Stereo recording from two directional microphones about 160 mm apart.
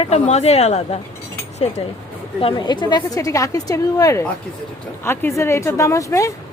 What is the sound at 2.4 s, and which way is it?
A woman's voice, 30° left (ahead or behind).